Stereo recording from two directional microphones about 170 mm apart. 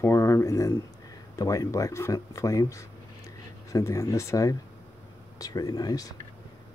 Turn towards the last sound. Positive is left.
turn(degrees=20)  # may be behind; listen again after turning